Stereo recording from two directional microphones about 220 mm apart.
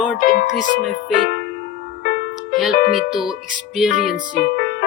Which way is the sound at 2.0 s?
45° left (ahead or behind).